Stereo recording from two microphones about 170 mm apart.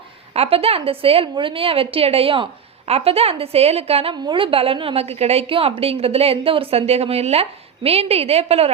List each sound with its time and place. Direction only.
0.3 s a woman's voice: 35° right (ahead or behind)